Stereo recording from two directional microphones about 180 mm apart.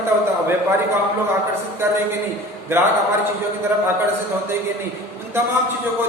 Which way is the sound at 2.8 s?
15° right (ahead or behind).